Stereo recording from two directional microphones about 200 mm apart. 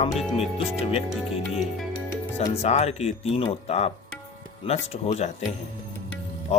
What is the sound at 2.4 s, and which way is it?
Speech, 35° left (ahead or behind).